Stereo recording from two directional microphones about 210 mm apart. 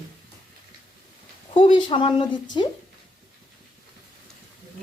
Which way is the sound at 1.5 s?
25° left (ahead or behind).